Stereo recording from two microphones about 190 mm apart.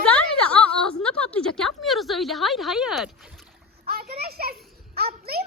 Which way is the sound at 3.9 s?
55° right (ahead or behind).